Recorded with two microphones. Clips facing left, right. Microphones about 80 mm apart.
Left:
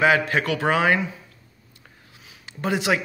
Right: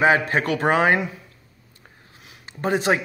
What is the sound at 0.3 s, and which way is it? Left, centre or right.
Mantra, right.